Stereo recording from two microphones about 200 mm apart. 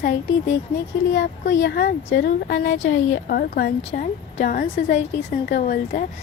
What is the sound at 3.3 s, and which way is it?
Speech, 50° left (ahead or behind).